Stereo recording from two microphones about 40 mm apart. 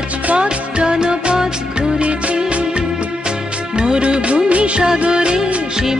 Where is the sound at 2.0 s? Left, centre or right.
Right.